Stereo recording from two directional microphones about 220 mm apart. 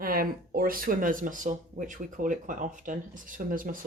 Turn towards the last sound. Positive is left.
turn(degrees=-40)  # may be behind; listen again after turning